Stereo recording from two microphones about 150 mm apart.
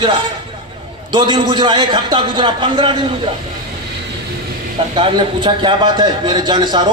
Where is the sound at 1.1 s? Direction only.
30° right (ahead or behind).